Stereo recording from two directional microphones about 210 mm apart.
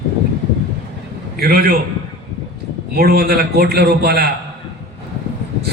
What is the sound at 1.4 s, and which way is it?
Speech, 45° right (ahead or behind).